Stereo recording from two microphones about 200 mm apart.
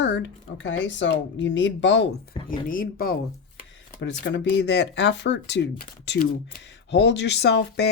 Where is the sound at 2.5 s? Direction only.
45° left (ahead or behind).